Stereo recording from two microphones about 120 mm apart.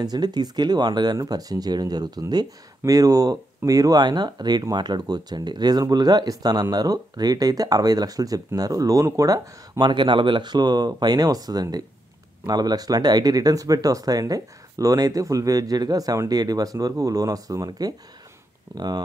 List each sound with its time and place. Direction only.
0.0 s speech: 35° right (ahead or behind)